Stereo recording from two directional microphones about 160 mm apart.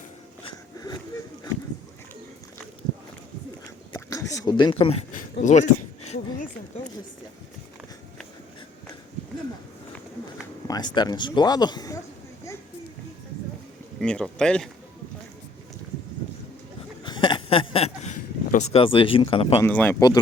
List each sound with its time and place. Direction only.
3.9 s a sound: 20° left (ahead or behind); by 5.0 s 35° left (ahead or behind)
5.1 s speech: 50° left (ahead or behind)
10.7 s speech: 25° left (ahead or behind)
14.0 s speech: 5° left (ahead or behind)
17.0 s a sound: 30° left (ahead or behind); by 18.8 s 45° left (ahead or behind)
18.8 s speech: 35° left (ahead or behind)
19.6 s speech: 10° left (ahead or behind)